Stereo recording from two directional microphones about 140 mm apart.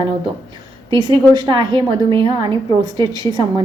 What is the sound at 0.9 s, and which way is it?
A woman's voice, 35° right (ahead or behind).